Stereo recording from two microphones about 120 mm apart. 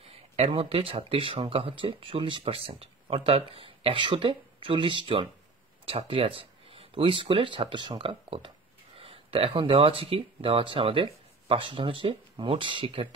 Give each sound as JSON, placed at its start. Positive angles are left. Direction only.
{"t": 0.4, "sound": "speech", "side_deg": -50}